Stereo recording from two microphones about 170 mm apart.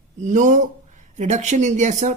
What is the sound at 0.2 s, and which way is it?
Speech, 45° right (ahead or behind).